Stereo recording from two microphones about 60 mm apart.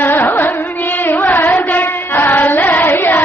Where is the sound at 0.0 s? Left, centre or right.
Left.